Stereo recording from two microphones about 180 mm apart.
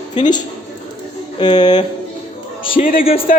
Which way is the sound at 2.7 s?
50° left (ahead or behind).